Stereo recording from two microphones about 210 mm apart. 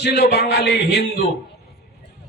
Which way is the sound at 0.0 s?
50° left (ahead or behind).